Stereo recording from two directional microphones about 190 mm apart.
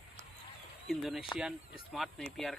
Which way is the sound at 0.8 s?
Centre (ahead or behind).